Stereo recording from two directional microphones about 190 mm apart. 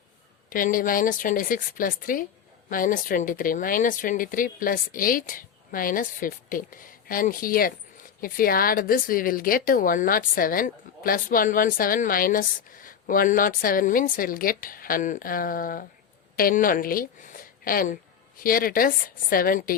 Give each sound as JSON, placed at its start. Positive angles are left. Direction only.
{"t": 0.5, "sound": "a woman's voice", "side_deg": 45}